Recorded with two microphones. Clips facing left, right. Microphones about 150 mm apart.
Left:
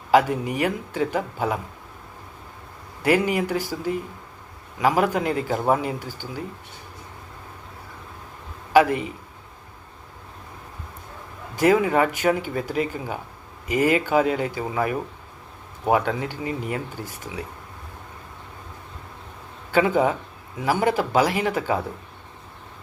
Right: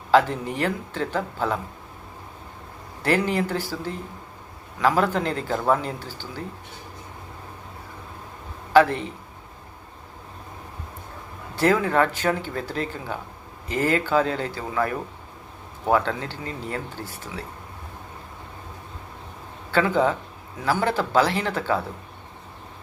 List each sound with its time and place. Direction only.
0.1 s speech: 10° left (ahead or behind)
3.0 s speech: 10° left (ahead or behind)
8.7 s a man's voice: 10° left (ahead or behind)
11.5 s speech: 15° left (ahead or behind)
19.7 s speech: 15° left (ahead or behind)